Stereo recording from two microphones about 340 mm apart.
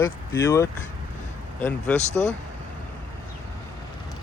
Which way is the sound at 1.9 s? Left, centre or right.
Centre.